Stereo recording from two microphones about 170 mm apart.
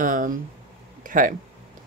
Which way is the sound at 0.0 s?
50° right (ahead or behind).